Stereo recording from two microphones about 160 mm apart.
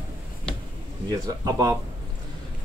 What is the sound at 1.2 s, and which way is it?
Speech, 20° right (ahead or behind).